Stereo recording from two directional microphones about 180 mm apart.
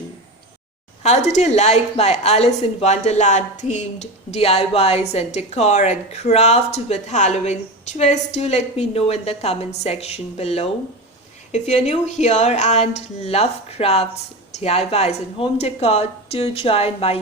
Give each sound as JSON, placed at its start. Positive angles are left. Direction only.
{"t": 1.0, "sound": "a woman's voice", "side_deg": 40}